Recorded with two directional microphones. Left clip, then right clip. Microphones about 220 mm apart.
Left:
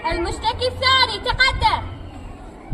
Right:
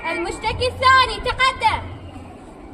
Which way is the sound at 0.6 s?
20° right (ahead or behind).